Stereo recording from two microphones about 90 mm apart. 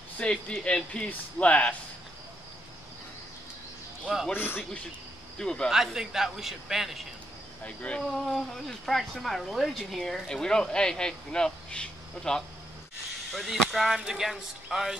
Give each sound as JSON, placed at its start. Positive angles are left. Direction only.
{"t": 0.2, "sound": "speech", "side_deg": 10}
{"t": 4.3, "sound": "speech", "side_deg": 25}
{"t": 5.4, "sound": "speech", "side_deg": 10}
{"t": 5.7, "sound": "speech", "side_deg": -5}
{"t": 7.6, "sound": "speech", "side_deg": 15}
{"t": 8.1, "sound": "speech", "side_deg": 0}